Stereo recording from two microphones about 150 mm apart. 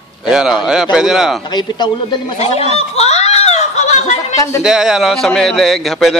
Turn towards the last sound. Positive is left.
turn(degrees=0)  # may be behind; listen again after turning